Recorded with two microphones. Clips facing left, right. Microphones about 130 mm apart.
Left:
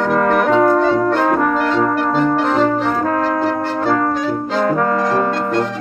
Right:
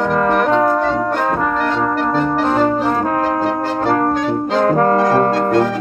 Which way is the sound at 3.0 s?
25° right (ahead or behind).